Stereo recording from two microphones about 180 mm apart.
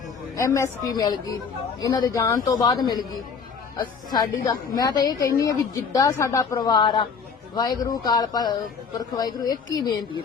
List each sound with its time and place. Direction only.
0.3 s a woman's voice: 15° left (ahead or behind)